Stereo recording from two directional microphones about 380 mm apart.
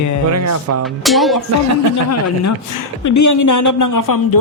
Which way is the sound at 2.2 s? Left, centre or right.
Left.